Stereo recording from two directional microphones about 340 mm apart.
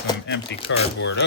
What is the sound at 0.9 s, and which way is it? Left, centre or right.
Speech, left.